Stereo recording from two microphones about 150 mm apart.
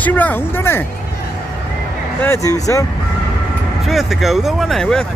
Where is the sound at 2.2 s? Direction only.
20° left (ahead or behind).